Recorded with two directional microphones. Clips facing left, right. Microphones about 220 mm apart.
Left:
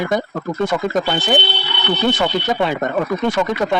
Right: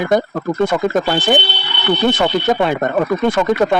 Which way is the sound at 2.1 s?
50° right (ahead or behind).